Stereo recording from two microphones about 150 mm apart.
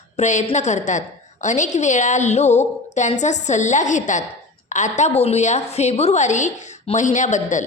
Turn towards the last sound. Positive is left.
turn(degrees=55)  # may be behind; listen again after turning